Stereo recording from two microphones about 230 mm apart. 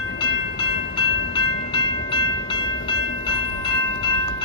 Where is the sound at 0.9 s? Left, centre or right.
Left.